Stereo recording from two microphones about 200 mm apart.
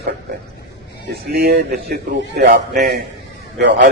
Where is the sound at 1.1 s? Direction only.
50° right (ahead or behind).